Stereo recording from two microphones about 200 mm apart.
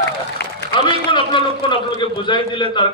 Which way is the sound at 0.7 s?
25° left (ahead or behind).